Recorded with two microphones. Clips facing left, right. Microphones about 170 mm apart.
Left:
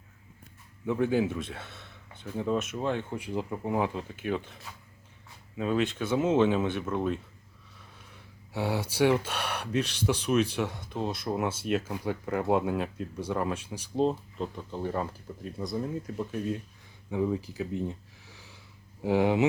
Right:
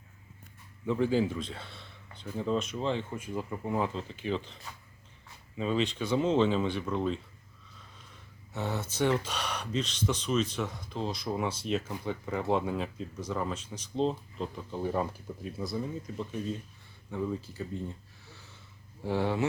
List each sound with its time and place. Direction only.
0.9 s speech: 10° left (ahead or behind)
4.7 s a sound: 5° left (ahead or behind)
5.5 s speech: 5° left (ahead or behind)
8.5 s speech: 10° left (ahead or behind)
18.3 s a sound: 10° left (ahead or behind)
19.0 s speech: 15° left (ahead or behind)